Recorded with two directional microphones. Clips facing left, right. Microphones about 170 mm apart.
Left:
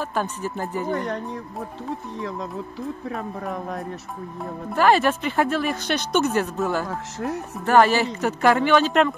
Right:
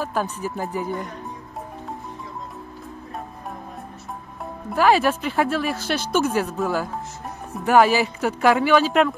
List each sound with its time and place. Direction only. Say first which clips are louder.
0.0 s speech: right 1 dB; 5° right (ahead or behind)
0.9 s speech: left 5 dB; 75° left (ahead or behind)
3.1 s a man's voice: left 3 dB; 90° left
4.7 s speech: even; 5° right (ahead or behind)
6.9 s a man's voice: left 5 dB; 90° left
7.6 s speech: right 1 dB; 5° right (ahead or behind)